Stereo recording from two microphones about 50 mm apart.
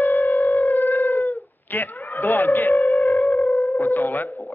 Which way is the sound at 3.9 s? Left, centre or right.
Left.